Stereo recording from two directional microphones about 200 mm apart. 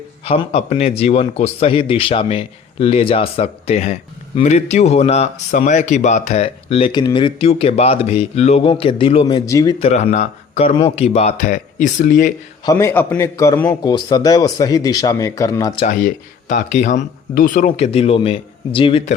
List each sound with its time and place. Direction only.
0.3 s speech: 30° left (ahead or behind)
9.8 s speech: 35° left (ahead or behind)
12.6 s a man's voice: 15° left (ahead or behind)
15.9 s speech: 45° left (ahead or behind); by 19.1 s 30° left (ahead or behind)